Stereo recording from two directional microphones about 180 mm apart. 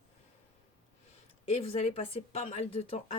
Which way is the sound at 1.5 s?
35° left (ahead or behind).